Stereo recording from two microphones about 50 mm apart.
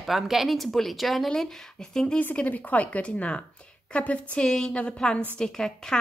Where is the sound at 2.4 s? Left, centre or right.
Left.